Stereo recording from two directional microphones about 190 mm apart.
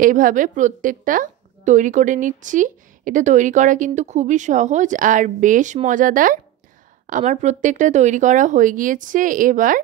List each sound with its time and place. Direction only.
0.0 s a woman's voice: 45° right (ahead or behind)